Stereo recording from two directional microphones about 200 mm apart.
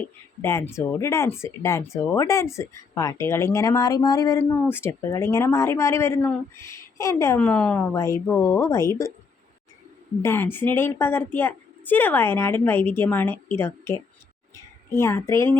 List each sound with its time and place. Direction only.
0.4 s speech: 15° left (ahead or behind)
10.2 s a child's voice: 10° left (ahead or behind)